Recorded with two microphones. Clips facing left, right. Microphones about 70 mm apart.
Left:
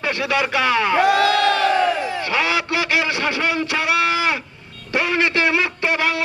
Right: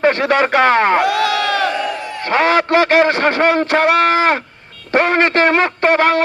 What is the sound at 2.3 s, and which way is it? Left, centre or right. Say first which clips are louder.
A man's voice: right 10 dB; right.